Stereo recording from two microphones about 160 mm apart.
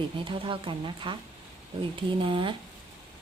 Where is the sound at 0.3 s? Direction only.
30° right (ahead or behind).